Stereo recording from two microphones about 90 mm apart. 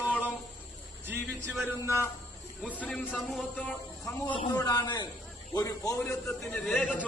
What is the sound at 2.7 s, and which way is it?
Speech, 15° left (ahead or behind).